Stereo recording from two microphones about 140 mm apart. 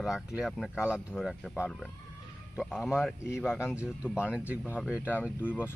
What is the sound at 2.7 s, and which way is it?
Speech, 5° left (ahead or behind).